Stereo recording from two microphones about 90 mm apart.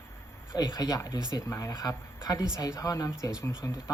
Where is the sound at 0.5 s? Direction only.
45° left (ahead or behind).